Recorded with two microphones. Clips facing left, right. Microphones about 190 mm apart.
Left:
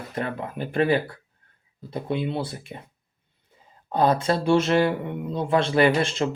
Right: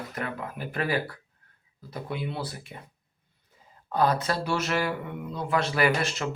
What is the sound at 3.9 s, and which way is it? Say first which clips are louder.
Speech: left 4 dB; 25° left (ahead or behind).